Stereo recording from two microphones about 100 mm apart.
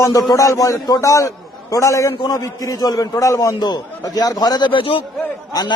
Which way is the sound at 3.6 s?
45° left (ahead or behind).